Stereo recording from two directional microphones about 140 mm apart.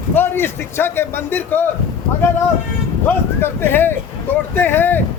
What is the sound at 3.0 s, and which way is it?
A man's voice, 15° left (ahead or behind).